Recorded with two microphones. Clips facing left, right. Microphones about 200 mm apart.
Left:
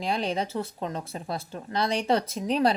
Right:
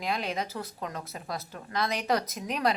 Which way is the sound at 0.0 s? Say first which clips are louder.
Left 4 dB; 30° left (ahead or behind).